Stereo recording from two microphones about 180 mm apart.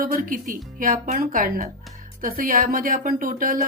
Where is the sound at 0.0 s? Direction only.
50° right (ahead or behind).